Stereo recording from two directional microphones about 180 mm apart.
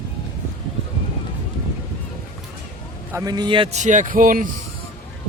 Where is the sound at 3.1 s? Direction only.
20° right (ahead or behind); by 4.5 s 50° right (ahead or behind).